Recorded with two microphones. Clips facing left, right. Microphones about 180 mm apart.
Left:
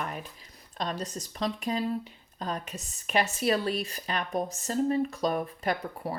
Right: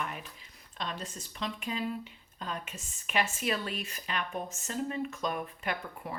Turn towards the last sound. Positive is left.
turn(degrees=35)  # may be behind; listen again after turning